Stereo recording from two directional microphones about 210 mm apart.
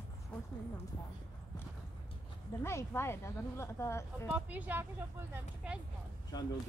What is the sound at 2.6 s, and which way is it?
Speech, 10° left (ahead or behind).